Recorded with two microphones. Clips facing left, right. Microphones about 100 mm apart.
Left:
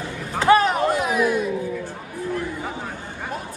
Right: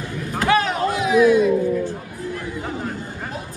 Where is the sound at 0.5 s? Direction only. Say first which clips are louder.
Left 3 dB; 40° left (ahead or behind).